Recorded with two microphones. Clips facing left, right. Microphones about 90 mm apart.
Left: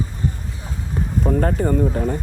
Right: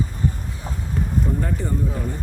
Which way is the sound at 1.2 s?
80° left.